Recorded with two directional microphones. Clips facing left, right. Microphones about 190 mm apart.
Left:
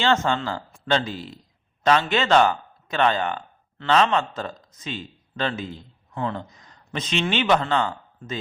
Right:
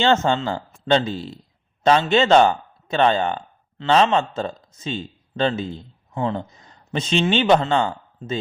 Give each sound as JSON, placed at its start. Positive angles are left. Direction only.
{"t": 0.0, "sound": "speech", "side_deg": -25}